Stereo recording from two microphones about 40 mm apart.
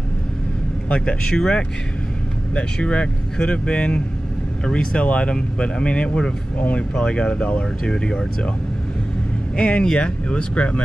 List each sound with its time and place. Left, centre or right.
0.8 s speech: left
7.9 s speech: centre
9.6 s speech: left